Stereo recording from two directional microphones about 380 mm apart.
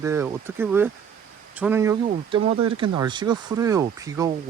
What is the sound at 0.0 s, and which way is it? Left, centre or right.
Speech, centre.